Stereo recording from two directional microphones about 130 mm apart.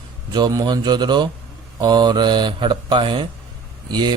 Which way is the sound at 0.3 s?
35° right (ahead or behind).